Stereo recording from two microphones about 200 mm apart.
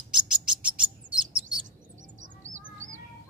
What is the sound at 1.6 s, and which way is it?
Bird, 40° right (ahead or behind).